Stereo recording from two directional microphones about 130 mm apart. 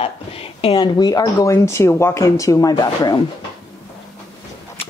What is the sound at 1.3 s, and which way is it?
Speech, 20° left (ahead or behind).